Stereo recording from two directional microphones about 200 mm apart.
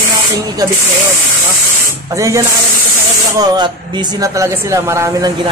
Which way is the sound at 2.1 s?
15° right (ahead or behind).